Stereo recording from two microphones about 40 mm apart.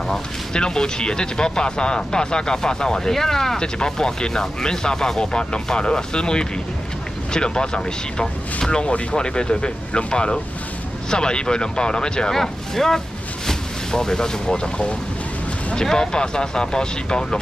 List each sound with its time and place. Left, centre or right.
0.5 s speech: centre